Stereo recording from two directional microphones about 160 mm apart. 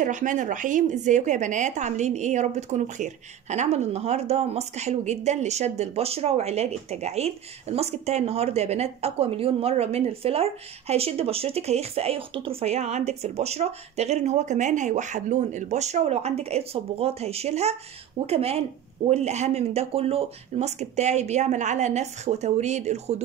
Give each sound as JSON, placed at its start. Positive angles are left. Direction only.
{"t": 0.0, "sound": "a woman's voice", "side_deg": -50}